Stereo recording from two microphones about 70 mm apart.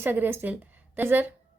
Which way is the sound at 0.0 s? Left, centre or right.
Right.